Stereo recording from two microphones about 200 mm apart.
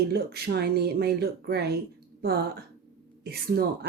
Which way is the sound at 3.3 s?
50° right (ahead or behind).